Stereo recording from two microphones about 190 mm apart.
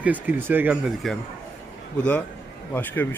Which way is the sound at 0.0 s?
10° right (ahead or behind).